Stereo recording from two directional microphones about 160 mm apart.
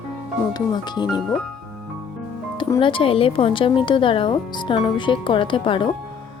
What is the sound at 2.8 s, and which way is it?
Speech, 30° left (ahead or behind).